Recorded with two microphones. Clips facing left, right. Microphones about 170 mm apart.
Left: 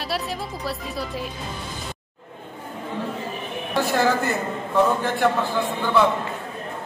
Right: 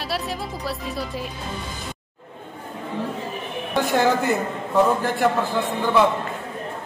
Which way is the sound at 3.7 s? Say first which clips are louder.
Right 1 dB; 15° right (ahead or behind).